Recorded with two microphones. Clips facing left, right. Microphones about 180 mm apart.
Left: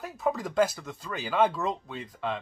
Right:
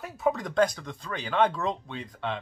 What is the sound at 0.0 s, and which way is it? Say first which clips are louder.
Speech: right 2 dB; centre (ahead or behind).